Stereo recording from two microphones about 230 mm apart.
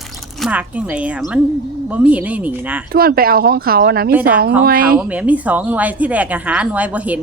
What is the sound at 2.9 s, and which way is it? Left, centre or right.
Speech, right.